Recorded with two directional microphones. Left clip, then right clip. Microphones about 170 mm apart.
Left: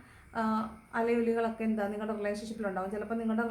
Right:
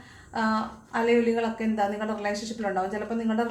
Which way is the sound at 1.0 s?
15° left (ahead or behind).